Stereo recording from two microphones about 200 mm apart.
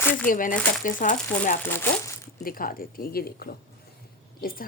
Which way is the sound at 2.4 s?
45° left (ahead or behind).